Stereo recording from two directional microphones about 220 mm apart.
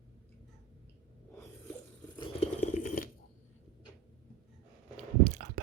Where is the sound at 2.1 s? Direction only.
25° left (ahead or behind).